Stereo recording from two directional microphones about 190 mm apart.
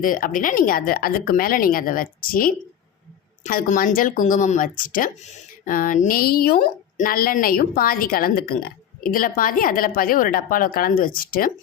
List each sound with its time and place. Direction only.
0.0 s a woman's voice: 45° left (ahead or behind)